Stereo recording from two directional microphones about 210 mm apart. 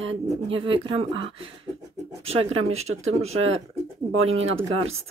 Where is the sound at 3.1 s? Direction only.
30° right (ahead or behind).